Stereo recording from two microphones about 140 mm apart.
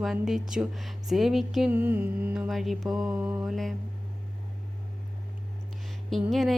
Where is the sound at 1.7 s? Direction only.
15° right (ahead or behind).